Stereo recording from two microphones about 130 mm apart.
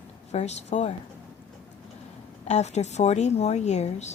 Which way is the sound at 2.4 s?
60° left (ahead or behind).